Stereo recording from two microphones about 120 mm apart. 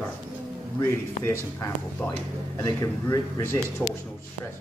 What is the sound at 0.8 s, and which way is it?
Speech, 20° left (ahead or behind).